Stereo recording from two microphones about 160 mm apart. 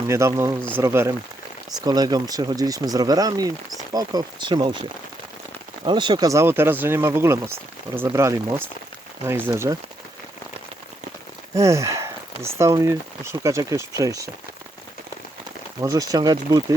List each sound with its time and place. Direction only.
0.1 s speech: 15° right (ahead or behind)
11.5 s speech: 20° right (ahead or behind)
15.8 s speech: 20° right (ahead or behind)